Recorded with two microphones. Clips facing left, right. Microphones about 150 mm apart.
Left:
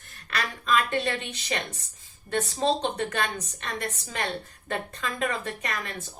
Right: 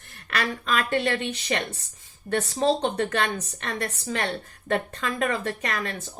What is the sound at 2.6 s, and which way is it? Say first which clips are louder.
A woman's voice: right 3 dB; 60° right (ahead or behind).